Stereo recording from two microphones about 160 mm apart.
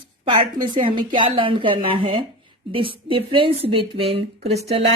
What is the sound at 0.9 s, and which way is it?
Speech, 30° right (ahead or behind).